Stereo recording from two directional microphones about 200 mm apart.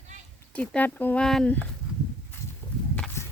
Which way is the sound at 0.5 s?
5° left (ahead or behind).